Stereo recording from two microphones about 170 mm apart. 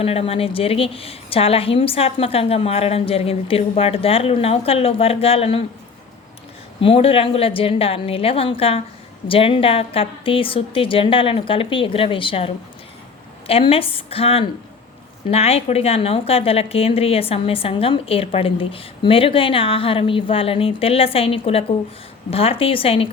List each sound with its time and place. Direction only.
0.0 s a woman's voice: 35° left (ahead or behind)
6.8 s a woman's voice: 35° left (ahead or behind)
13.5 s a woman's voice: 35° left (ahead or behind)